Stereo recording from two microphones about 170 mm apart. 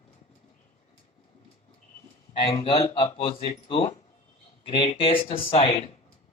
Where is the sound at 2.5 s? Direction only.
35° left (ahead or behind).